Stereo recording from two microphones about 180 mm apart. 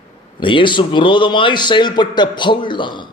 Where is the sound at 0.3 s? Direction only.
25° left (ahead or behind).